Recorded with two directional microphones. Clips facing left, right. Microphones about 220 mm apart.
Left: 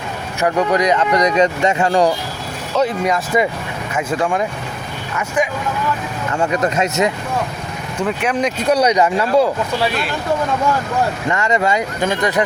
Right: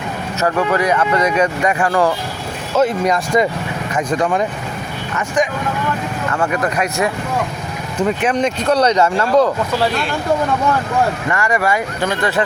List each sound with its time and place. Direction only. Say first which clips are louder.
0.4 s speech: left 1 dB; 15° left (ahead or behind)
2.7 s speech: right 2 dB; centre (ahead or behind)
6.3 s speech: left 2 dB; 20° left (ahead or behind)
7.9 s speech: right 2 dB; centre (ahead or behind)
8.6 s speech: even; 10° left (ahead or behind)
11.3 s speech: even; 20° left (ahead or behind)